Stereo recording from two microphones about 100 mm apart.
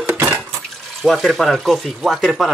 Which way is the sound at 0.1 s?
20° right (ahead or behind).